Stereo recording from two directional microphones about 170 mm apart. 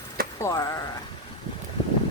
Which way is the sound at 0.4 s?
20° left (ahead or behind).